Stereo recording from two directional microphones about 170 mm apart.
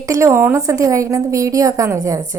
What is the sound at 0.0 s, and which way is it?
A woman's voice, 15° right (ahead or behind).